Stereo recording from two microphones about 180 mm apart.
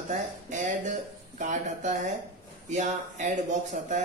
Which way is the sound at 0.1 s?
45° right (ahead or behind).